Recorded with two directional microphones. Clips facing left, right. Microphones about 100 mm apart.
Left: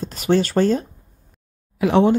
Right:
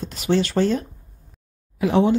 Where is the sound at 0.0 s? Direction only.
45° left (ahead or behind).